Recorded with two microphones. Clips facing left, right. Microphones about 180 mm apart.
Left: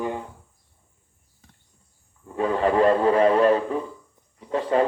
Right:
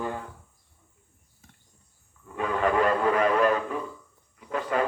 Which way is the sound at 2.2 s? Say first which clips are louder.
Left 4 dB; 30° left (ahead or behind).